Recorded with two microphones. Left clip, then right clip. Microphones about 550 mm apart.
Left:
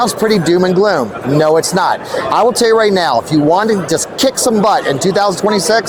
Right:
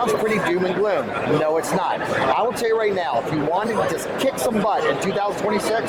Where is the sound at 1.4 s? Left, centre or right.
Left.